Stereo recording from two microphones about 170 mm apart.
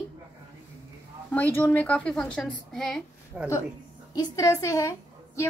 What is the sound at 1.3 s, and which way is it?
A woman's voice, 10° left (ahead or behind).